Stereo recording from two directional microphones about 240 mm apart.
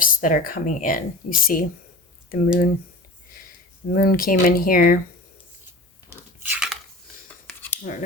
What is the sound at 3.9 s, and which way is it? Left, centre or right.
Speech, left.